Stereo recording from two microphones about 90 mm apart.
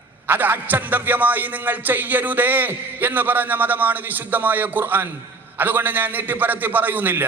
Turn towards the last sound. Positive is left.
turn(degrees=-20)  # may be behind; listen again after turning